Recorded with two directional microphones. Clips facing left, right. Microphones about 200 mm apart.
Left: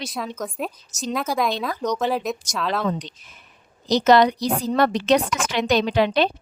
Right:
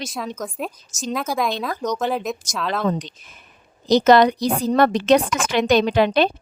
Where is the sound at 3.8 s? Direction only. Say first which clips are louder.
Right 2 dB; 50° right (ahead or behind).